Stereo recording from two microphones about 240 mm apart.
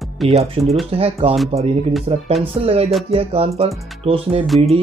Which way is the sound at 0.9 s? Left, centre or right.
Right.